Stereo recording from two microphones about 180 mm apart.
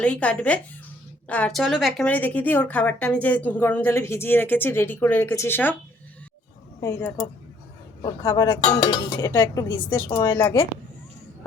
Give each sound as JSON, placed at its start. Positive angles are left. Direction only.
{"t": 0.0, "sound": "a woman's voice", "side_deg": 5}
{"t": 6.8, "sound": "a woman's voice", "side_deg": 15}